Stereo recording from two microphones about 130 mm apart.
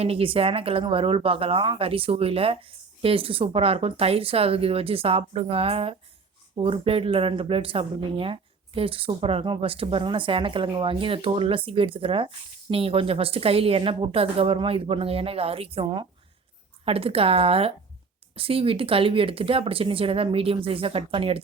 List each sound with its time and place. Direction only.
0.0 s speech: 45° right (ahead or behind)